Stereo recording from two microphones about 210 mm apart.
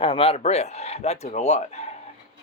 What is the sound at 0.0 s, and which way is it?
Speech, 25° left (ahead or behind).